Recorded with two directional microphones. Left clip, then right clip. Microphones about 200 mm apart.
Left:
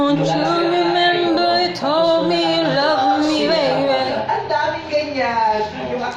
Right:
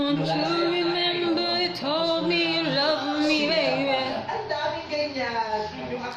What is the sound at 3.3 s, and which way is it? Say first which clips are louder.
Carnatic music: left 6 dB; centre (ahead or behind).